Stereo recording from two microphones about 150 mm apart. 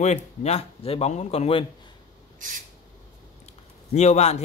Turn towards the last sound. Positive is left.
turn(degrees=45)  # may be behind; listen again after turning